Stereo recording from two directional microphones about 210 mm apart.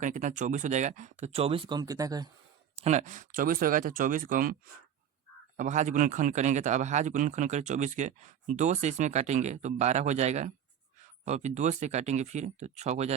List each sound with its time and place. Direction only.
0.0 s speech: 35° right (ahead or behind); by 2.3 s 20° right (ahead or behind)
2.8 s speech: 35° right (ahead or behind)
5.5 s speech: 35° right (ahead or behind)